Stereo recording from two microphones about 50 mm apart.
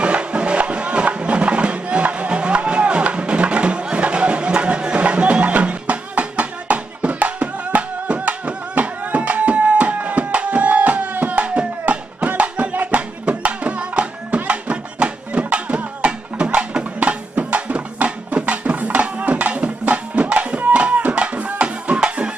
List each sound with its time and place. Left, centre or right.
0.0 s music: right